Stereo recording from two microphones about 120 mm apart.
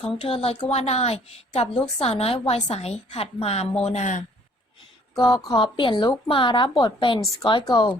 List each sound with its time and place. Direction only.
0.2 s a woman's voice: 55° left (ahead or behind)
3.8 s speech: 75° left (ahead or behind)
5.1 s a woman's voice: 35° left (ahead or behind)